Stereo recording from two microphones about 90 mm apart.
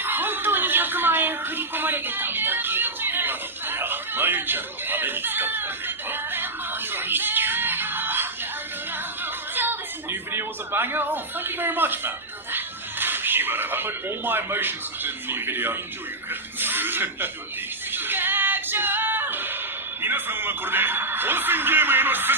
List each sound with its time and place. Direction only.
0.0 s a sound: 20° right (ahead or behind)
16.3 s speech: 20° right (ahead or behind)
17.9 s music: 20° right (ahead or behind)
20.0 s speech: 25° right (ahead or behind)